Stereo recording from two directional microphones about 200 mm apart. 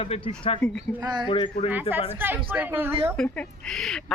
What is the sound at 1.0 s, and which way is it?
Speech, 20° right (ahead or behind).